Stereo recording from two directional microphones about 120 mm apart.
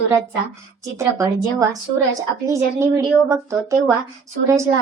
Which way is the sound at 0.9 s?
25° right (ahead or behind).